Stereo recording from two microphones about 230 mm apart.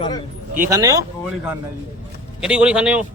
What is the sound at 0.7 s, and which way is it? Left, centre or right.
Speech, centre.